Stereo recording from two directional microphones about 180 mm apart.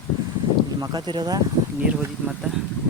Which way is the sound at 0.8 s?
25° right (ahead or behind).